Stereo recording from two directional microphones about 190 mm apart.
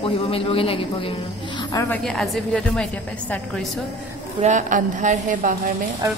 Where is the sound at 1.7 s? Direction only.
15° left (ahead or behind).